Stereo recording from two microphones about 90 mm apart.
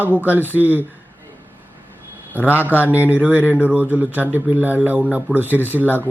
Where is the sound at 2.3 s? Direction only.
20° right (ahead or behind).